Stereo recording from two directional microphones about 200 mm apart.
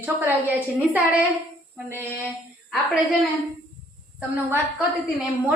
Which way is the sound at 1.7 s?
10° right (ahead or behind).